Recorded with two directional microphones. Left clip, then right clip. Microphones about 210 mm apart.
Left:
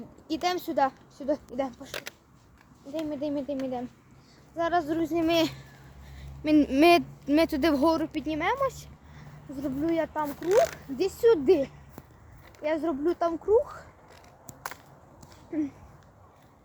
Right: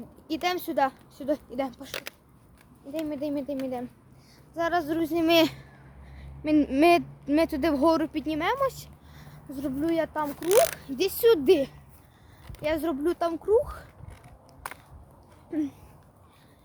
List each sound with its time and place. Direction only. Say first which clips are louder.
0.3 s speech: even; centre (ahead or behind); by 2.1 s 15° right (ahead or behind)
3.1 s speech: left 1 dB; 5° right (ahead or behind)
5.2 s speech: right 5 dB; 55° right (ahead or behind)
6.1 s speech: left 1 dB; centre (ahead or behind)
8.1 s a woman's voice: right 1 dB; 20° right (ahead or behind)